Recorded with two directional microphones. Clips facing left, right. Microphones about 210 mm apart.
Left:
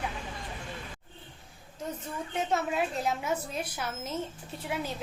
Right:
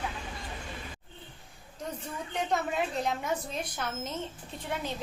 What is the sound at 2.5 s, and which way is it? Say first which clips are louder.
A woman's voice: left 1 dB; 5° left (ahead or behind).